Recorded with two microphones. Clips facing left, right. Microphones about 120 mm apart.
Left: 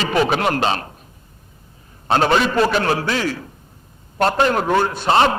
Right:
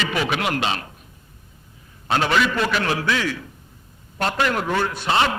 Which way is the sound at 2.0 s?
35° left (ahead or behind).